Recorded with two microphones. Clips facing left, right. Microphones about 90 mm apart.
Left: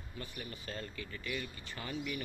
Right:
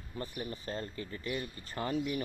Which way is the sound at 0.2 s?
35° right (ahead or behind).